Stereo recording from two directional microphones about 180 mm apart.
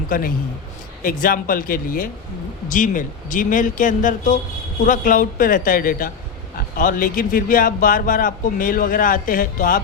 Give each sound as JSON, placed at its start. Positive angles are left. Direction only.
{"t": 0.1, "sound": "speech", "side_deg": 50}